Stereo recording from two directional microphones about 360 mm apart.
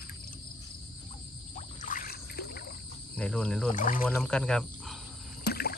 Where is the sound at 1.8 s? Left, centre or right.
Left.